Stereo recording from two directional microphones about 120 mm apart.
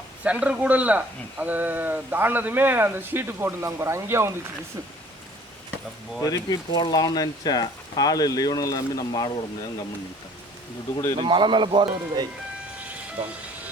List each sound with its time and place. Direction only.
0.3 s a man's voice: 10° right (ahead or behind)
6.1 s speech: 30° left (ahead or behind)
11.2 s speech: 40° right (ahead or behind)